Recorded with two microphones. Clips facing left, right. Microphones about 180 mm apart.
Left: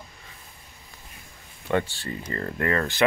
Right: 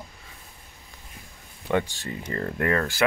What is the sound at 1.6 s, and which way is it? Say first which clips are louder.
Speech: even; 15° right (ahead or behind).